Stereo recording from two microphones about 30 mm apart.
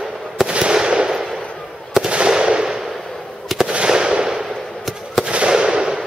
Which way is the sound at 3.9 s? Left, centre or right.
Right.